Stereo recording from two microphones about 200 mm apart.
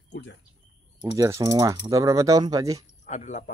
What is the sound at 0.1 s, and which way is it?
Bird, 60° left (ahead or behind).